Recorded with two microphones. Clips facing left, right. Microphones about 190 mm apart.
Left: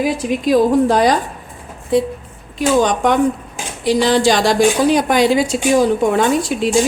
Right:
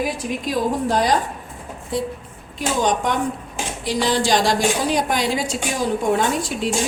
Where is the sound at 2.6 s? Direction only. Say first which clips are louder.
Left 6 dB; 85° left.